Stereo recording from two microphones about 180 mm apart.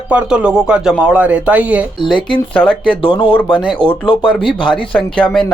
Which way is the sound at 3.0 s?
25° left (ahead or behind).